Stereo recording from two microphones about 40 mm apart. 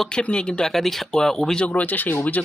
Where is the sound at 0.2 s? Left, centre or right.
Left.